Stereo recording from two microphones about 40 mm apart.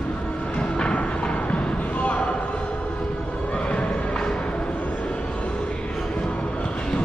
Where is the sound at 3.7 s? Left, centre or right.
Left.